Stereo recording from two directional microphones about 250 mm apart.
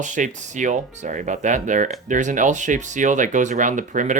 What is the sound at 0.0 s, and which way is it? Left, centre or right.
Speech, right.